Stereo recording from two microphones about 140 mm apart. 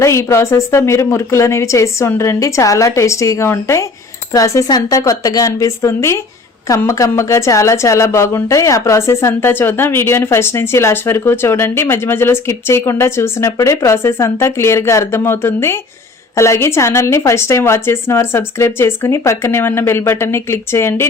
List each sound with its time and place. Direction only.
0.0 s a woman's voice: 20° left (ahead or behind)